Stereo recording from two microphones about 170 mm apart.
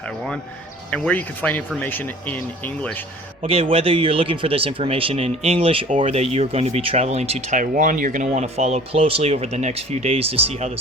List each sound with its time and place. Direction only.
0.9 s speech: 5° left (ahead or behind)
3.4 s speech: 35° right (ahead or behind)